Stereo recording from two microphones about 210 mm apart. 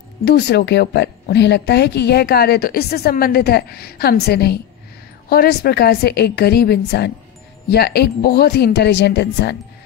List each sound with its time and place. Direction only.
0.2 s a woman's voice: 50° left (ahead or behind)